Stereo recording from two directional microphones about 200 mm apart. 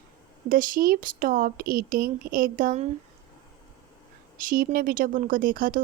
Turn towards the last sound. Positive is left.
turn(degrees=-45)  # may be behind; listen again after turning